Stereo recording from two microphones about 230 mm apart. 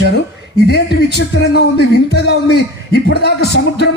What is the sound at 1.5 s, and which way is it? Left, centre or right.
A man's voice, left.